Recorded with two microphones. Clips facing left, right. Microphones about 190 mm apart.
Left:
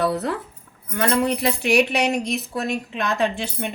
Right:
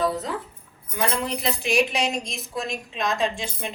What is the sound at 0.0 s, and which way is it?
A woman's voice, 65° left (ahead or behind).